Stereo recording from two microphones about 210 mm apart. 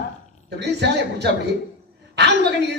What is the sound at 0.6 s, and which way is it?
Speech, 55° right (ahead or behind).